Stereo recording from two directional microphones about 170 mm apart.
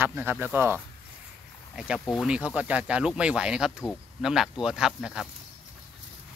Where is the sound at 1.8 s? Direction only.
5° right (ahead or behind).